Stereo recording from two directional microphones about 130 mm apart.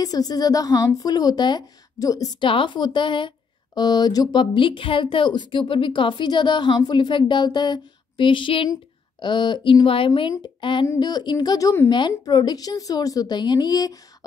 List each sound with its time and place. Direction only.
0.0 s a woman's voice: 30° left (ahead or behind)